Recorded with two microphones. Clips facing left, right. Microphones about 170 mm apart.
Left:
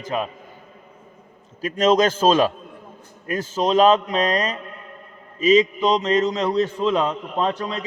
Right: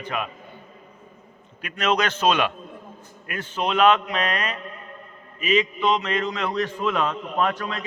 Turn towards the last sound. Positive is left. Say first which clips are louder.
# left 1 dB
turn(degrees=30)  # may be behind; listen again after turning